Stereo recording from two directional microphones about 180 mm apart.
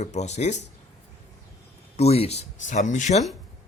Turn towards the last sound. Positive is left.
turn(degrees=40)  # may be behind; listen again after turning